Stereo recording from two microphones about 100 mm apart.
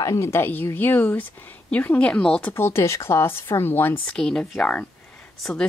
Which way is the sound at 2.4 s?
25° left (ahead or behind).